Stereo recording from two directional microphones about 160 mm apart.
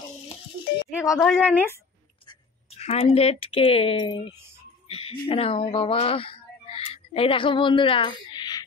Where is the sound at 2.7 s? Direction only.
40° left (ahead or behind).